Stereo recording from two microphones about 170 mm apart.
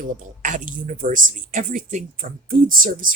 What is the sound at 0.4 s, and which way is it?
Speech, 50° right (ahead or behind).